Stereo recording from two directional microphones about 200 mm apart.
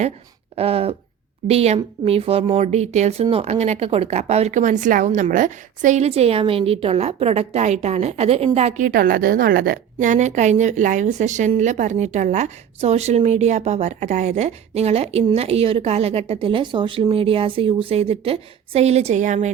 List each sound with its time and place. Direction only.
0.5 s a woman's voice: 30° right (ahead or behind)